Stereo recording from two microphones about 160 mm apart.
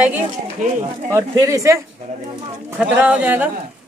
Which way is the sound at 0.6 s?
50° right (ahead or behind).